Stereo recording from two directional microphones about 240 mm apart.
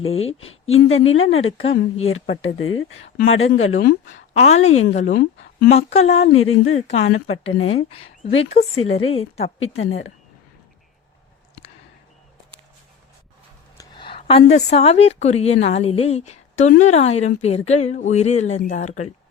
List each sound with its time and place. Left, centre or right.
0.3 s a woman's voice: left
0.7 s speech: left
1.6 s a woman's voice: left
2.0 s speech: left
3.8 s a woman's voice: left
6.3 s speech: left
6.7 s a woman's voice: left
8.7 s speech: left
9.1 s a woman's voice: left
9.6 s speech: left
13.7 s a woman's voice: centre